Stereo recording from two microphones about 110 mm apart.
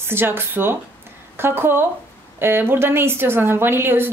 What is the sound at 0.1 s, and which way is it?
Speech, 20° right (ahead or behind).